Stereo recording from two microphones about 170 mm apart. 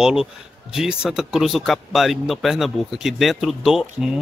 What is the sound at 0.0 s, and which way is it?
Speech, 5° right (ahead or behind).